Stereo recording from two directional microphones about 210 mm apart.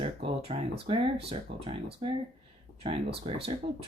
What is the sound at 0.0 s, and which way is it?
Speech, 25° right (ahead or behind).